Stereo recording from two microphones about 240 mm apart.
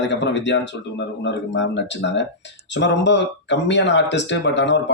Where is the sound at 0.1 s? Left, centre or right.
Left.